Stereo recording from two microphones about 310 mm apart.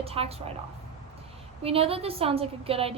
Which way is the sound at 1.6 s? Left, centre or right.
Centre.